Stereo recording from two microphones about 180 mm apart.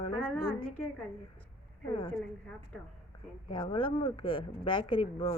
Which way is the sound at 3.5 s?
25° left (ahead or behind).